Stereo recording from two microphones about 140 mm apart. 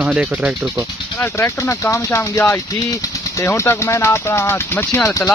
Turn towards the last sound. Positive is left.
turn(degrees=20)  # may be behind; listen again after turning